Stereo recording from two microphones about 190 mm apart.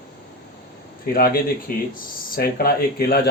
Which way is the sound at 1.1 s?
50° left (ahead or behind).